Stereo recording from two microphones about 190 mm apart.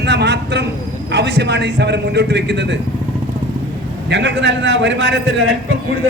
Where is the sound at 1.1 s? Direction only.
65° right (ahead or behind).